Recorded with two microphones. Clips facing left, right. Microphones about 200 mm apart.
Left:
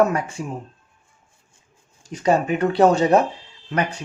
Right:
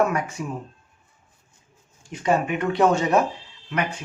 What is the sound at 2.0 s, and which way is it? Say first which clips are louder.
Speech: left 3 dB; 35° left (ahead or behind).